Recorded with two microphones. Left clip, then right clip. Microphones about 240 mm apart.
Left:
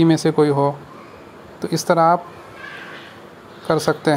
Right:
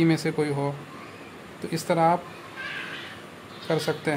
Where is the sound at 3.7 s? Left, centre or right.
Left.